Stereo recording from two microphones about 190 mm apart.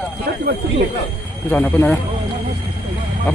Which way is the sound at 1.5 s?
10° left (ahead or behind).